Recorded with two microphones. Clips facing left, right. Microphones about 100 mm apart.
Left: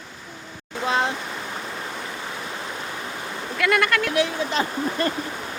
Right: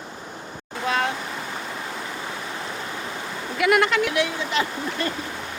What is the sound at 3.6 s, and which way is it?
Speech, 15° right (ahead or behind).